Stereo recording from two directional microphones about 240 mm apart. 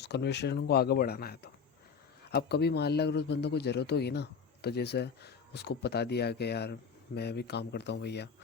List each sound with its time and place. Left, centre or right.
0.0 s a man's voice: left